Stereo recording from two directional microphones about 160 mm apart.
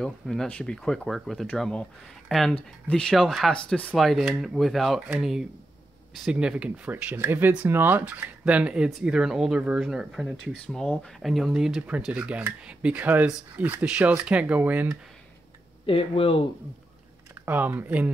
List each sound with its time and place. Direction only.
0.0 s speech: 5° left (ahead or behind)
15.8 s speech: 35° left (ahead or behind)
17.3 s speech: 10° right (ahead or behind)